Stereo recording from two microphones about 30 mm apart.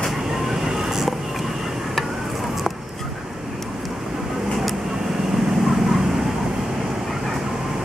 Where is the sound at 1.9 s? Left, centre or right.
Centre.